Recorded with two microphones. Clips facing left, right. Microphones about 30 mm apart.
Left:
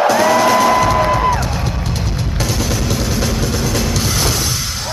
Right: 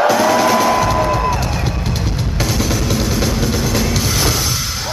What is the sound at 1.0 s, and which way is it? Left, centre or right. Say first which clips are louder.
Music: left 2 dB; left.